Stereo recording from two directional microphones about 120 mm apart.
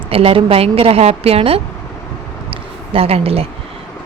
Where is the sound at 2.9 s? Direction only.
55° right (ahead or behind).